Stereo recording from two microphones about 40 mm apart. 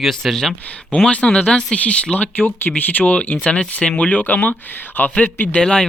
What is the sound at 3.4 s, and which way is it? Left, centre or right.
Speech, left.